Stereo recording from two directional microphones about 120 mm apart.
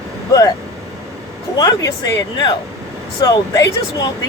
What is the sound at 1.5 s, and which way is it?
Speech, 35° left (ahead or behind).